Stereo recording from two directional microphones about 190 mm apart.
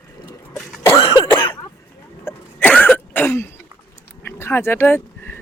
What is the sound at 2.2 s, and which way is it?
Throat clearing, 10° left (ahead or behind).